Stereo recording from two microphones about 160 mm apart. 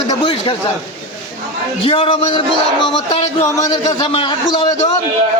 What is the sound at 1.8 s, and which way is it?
Speech, 35° left (ahead or behind).